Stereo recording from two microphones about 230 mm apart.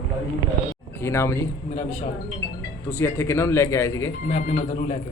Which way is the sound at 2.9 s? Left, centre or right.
Centre.